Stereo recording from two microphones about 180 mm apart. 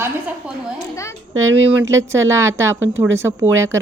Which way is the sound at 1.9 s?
15° right (ahead or behind).